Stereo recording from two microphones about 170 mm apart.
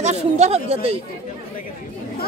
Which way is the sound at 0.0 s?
40° right (ahead or behind).